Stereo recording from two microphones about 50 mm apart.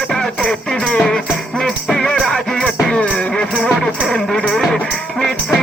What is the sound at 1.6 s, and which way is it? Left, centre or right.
Music, centre.